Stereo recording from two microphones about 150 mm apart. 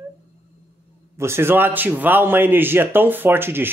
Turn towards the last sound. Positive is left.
turn(degrees=-15)  # may be behind; listen again after turning